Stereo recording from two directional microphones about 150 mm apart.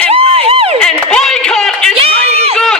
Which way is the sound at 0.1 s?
40° right (ahead or behind).